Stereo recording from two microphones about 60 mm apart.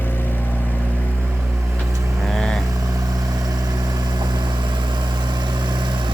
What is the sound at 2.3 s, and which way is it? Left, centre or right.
Vehicle, centre.